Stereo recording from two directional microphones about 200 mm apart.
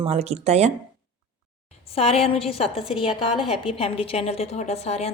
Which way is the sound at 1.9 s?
30° left (ahead or behind).